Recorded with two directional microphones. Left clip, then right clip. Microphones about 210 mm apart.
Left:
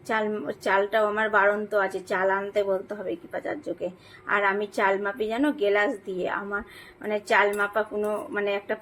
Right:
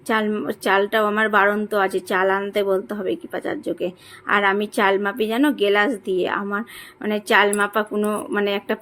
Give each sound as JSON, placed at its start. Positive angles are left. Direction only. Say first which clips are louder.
{"t": 0.1, "sound": "a woman's voice", "louder": "right 5 dB", "side_deg": -45}